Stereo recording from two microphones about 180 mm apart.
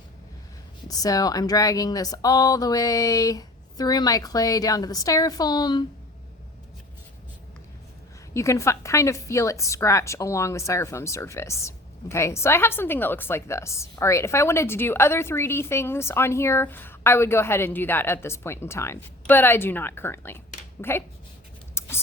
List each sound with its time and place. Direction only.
0.9 s speech: 20° left (ahead or behind)
8.3 s a woman's voice: 15° left (ahead or behind)
21.8 s whispering: 15° left (ahead or behind)